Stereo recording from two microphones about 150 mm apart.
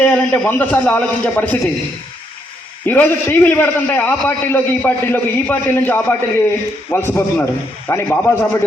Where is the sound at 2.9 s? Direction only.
15° left (ahead or behind).